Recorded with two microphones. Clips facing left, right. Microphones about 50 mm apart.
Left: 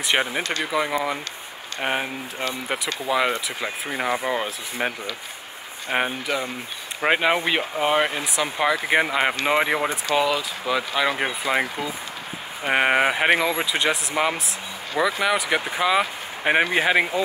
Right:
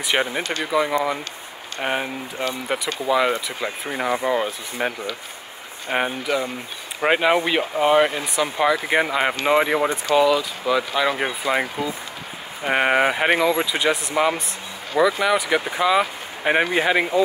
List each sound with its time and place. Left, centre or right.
0.0 s speech: centre